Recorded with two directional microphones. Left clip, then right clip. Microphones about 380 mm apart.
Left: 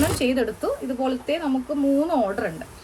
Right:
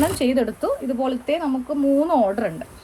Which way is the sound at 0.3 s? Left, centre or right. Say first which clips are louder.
Right 2 dB; centre.